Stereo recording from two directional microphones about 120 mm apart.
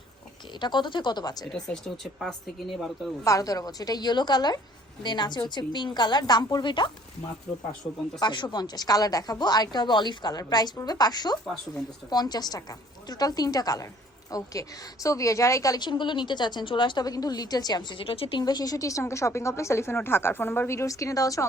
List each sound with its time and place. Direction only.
0.6 s speech: 40° left (ahead or behind)
1.6 s speech: 5° left (ahead or behind)
3.2 s speech: 30° left (ahead or behind)
8.2 s a woman's voice: 40° left (ahead or behind)
18.4 s a woman's voice: 35° left (ahead or behind)